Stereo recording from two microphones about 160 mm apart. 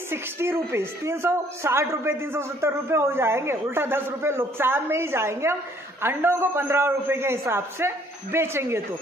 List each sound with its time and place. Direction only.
0.1 s a woman's voice: 15° right (ahead or behind)